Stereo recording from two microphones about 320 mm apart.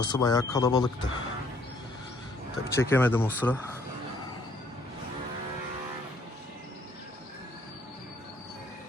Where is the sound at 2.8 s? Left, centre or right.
Centre.